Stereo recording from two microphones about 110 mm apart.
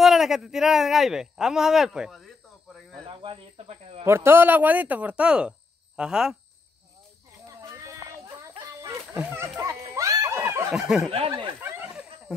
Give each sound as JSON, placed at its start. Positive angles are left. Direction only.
{"t": 0.0, "sound": "speech", "side_deg": -5}
{"t": 3.1, "sound": "speech", "side_deg": -55}
{"t": 3.6, "sound": "speech", "side_deg": -70}
{"t": 4.0, "sound": "speech", "side_deg": -25}
{"t": 7.4, "sound": "horse", "side_deg": -30}
{"t": 8.5, "sound": "a sound", "side_deg": -30}
{"t": 10.7, "sound": "speech", "side_deg": -5}
{"t": 11.1, "sound": "speech", "side_deg": -60}
{"t": 11.9, "sound": "wild animals", "side_deg": -5}